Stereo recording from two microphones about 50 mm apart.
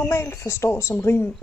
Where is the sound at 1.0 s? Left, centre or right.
Left.